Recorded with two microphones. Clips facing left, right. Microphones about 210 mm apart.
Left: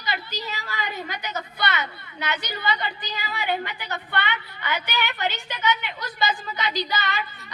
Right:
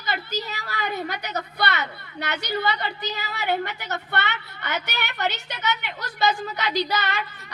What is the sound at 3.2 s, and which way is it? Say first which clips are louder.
Speech: right 1 dB; 45° right (ahead or behind).